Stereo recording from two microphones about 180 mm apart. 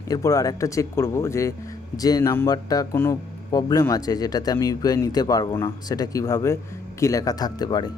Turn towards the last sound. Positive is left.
turn(degrees=20)  # may be behind; listen again after turning